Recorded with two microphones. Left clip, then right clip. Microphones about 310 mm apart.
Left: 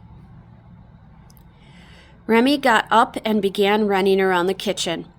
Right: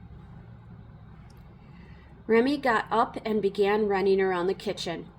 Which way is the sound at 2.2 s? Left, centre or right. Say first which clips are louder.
Left 7 dB; centre.